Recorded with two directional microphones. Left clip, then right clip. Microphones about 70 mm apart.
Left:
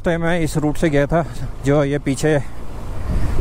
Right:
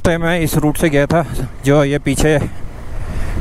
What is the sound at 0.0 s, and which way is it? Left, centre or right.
Speech, right.